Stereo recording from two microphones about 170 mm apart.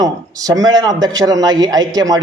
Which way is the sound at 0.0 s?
20° right (ahead or behind).